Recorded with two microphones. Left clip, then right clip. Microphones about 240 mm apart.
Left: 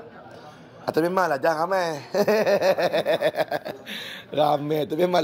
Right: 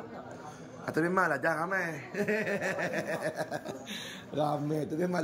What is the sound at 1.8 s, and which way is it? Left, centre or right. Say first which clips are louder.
Speech: left 10 dB; centre.